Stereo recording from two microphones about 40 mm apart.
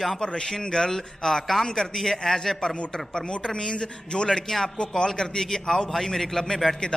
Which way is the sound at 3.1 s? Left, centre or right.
Left.